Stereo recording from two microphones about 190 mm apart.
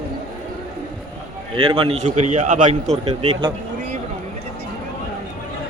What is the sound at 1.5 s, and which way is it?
A man's voice, 25° right (ahead or behind).